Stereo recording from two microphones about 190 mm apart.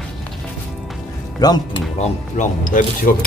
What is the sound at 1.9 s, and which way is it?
Speech, 40° left (ahead or behind).